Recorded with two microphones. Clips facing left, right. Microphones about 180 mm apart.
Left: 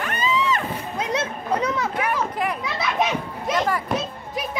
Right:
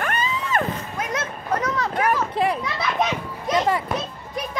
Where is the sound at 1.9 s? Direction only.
35° right (ahead or behind).